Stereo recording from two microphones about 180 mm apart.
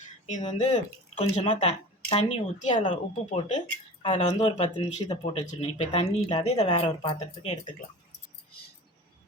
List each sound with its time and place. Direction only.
0.3 s speech: 40° left (ahead or behind)